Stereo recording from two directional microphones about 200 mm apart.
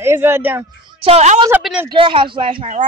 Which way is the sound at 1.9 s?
25° right (ahead or behind).